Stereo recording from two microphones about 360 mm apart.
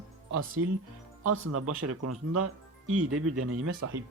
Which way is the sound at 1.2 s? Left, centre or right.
Right.